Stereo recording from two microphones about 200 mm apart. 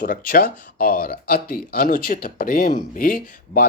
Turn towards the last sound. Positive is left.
turn(degrees=45)  # may be behind; listen again after turning